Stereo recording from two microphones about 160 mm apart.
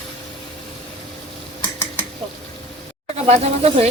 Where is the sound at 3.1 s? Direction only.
40° right (ahead or behind).